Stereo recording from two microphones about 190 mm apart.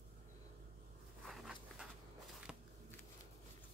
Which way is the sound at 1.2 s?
Centre (ahead or behind).